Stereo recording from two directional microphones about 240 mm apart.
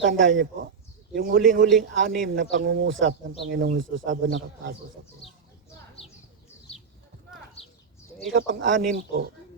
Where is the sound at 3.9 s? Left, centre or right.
Right.